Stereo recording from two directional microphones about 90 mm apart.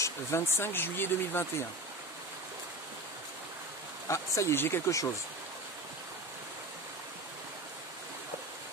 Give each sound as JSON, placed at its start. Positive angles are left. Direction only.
{"t": 0.0, "sound": "speech", "side_deg": 30}
{"t": 4.1, "sound": "speech", "side_deg": 30}